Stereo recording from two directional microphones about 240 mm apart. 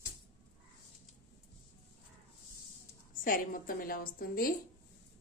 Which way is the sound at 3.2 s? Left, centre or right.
Left.